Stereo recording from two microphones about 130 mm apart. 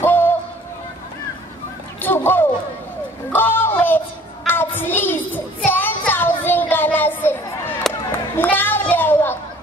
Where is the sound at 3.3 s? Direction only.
15° left (ahead or behind).